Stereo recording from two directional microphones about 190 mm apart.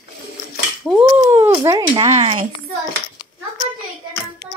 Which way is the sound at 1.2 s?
15° right (ahead or behind).